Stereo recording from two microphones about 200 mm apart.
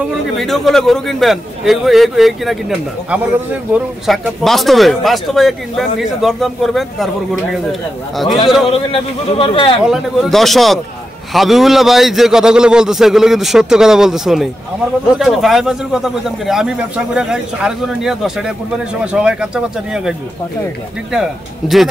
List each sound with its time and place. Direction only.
0.0 s speech: centre (ahead or behind)
3.7 s speech: centre (ahead or behind)
8.6 s a man's voice: 30° left (ahead or behind)
9.8 s speech: centre (ahead or behind)